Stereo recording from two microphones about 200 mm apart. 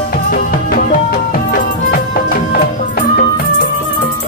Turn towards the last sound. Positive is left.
turn(degrees=45)  # may be behind; listen again after turning